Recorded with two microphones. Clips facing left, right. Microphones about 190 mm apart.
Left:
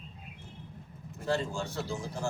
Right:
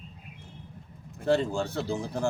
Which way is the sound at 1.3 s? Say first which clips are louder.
Right 6 dB; 60° right (ahead or behind).